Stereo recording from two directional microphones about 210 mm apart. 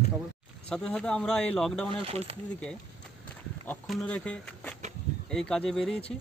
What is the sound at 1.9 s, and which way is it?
Speech, 25° right (ahead or behind).